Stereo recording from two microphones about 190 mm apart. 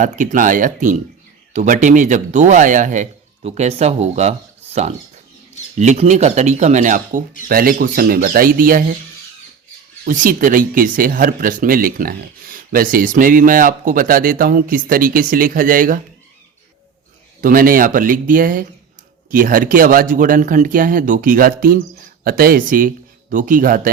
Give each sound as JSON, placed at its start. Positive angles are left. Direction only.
{"t": 0.0, "sound": "speech", "side_deg": -40}
{"t": 10.0, "sound": "speech", "side_deg": -45}
{"t": 17.4, "sound": "speech", "side_deg": -50}